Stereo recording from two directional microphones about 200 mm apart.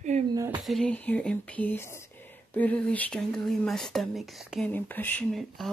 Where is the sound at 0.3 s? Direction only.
20° right (ahead or behind).